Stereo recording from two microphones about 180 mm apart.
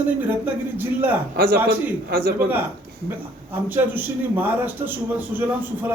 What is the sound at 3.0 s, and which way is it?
Speech, 10° right (ahead or behind).